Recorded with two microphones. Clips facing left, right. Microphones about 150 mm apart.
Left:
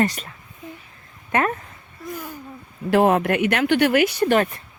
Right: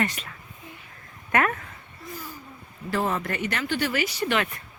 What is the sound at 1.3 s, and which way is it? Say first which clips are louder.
Speech: left 2 dB; 25° left (ahead or behind).